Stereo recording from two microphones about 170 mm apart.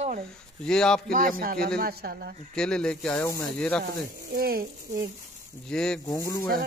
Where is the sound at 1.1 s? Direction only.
55° right (ahead or behind).